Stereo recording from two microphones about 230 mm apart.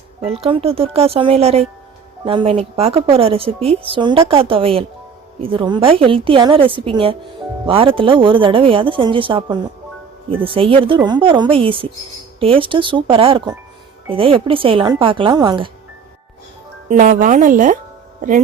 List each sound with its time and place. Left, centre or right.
0.2 s a woman's voice: right
16.9 s speech: right